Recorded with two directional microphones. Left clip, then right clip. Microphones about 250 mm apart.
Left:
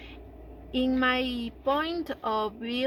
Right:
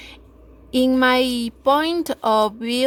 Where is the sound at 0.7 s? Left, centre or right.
Right.